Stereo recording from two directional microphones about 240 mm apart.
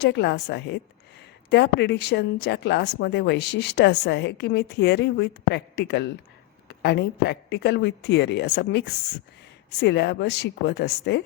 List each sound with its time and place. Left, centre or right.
0.0 s a woman's voice: left